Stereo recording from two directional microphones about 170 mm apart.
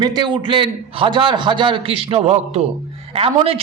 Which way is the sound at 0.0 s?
25° right (ahead or behind).